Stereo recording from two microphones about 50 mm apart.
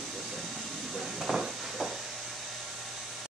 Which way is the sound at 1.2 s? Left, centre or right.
Centre.